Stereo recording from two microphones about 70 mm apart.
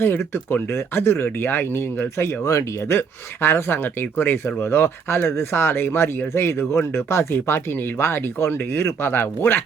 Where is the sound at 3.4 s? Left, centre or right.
Left.